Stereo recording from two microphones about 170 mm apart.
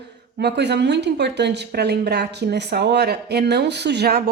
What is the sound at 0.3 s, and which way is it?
Speech, 80° right.